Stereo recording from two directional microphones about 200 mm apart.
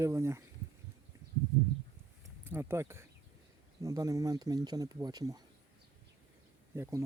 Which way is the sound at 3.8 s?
15° right (ahead or behind).